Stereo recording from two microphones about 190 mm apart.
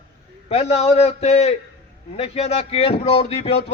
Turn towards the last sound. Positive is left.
turn(degrees=35)  # may be behind; listen again after turning